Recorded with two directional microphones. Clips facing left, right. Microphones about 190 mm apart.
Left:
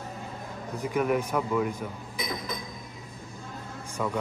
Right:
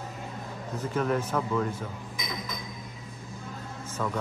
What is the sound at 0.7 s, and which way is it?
Speech, 10° left (ahead or behind).